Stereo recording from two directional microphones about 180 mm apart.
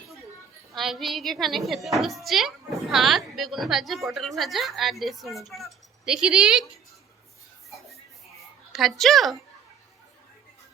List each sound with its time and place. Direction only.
0.7 s a woman's voice: centre (ahead or behind)
8.7 s a woman's voice: centre (ahead or behind)